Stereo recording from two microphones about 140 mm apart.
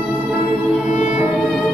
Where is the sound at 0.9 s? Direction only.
60° left (ahead or behind).